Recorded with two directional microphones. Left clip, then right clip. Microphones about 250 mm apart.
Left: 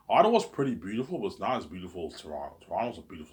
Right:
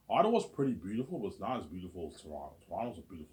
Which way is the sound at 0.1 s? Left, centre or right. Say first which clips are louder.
Left 7 dB; centre.